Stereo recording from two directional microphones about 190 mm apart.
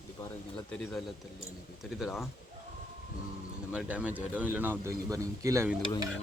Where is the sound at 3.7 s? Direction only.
5° right (ahead or behind).